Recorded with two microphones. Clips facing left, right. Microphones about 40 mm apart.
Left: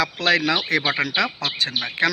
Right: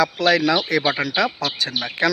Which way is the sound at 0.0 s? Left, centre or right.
Left.